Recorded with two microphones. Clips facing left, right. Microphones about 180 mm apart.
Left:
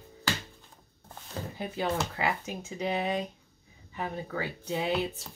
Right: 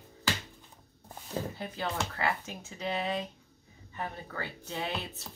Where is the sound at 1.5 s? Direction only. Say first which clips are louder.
Left 4 dB; 15° left (ahead or behind).